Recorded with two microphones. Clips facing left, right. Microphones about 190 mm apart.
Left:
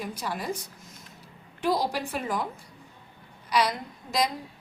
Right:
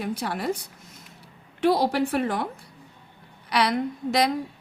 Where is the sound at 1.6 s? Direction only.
65° right (ahead or behind).